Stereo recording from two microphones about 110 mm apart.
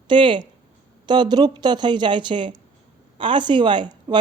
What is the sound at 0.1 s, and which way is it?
A man's voice, 45° right (ahead or behind).